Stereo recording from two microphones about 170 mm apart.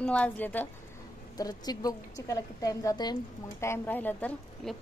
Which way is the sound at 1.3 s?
20° left (ahead or behind).